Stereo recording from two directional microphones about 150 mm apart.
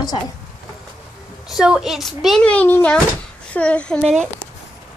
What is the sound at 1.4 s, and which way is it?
A child's voice, 5° right (ahead or behind).